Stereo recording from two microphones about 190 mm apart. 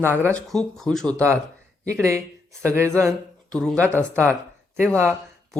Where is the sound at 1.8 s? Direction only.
15° right (ahead or behind).